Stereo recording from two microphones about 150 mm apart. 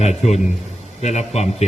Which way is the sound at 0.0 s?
45° left (ahead or behind).